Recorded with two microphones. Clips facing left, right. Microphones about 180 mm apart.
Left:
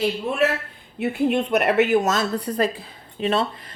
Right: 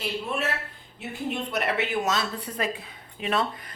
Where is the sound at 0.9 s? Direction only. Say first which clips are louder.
Left 11 dB; 60° left (ahead or behind).